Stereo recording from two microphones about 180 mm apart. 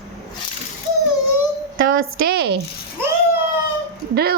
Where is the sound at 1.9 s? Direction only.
60° right (ahead or behind).